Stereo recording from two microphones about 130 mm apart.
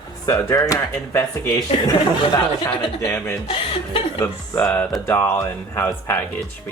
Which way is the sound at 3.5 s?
40° left (ahead or behind).